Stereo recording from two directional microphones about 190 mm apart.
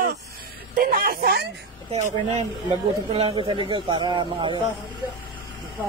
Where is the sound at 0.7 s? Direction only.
50° right (ahead or behind).